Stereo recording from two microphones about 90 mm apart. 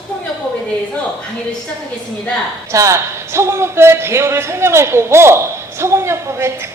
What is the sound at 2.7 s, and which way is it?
A man's voice, 35° right (ahead or behind).